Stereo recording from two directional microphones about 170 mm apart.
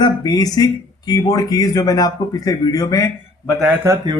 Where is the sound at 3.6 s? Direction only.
10° right (ahead or behind).